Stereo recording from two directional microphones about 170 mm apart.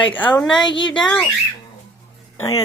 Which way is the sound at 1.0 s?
5° left (ahead or behind).